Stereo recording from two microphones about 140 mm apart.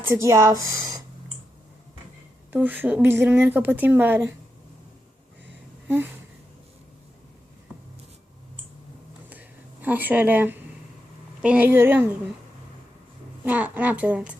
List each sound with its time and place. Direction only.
0.0 s speech: 20° right (ahead or behind)
2.5 s a woman's voice: 15° right (ahead or behind)
9.3 s a sound: 10° right (ahead or behind)
11.4 s a woman's voice: 10° right (ahead or behind)
13.4 s a woman's voice: 10° right (ahead or behind)